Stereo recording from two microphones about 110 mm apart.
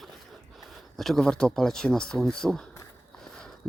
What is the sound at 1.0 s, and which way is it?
Speech, 5° left (ahead or behind).